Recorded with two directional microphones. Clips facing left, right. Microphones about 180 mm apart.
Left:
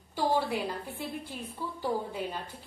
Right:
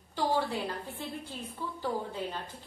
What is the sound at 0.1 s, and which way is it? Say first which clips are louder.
A woman's voice: left 2 dB; 10° left (ahead or behind).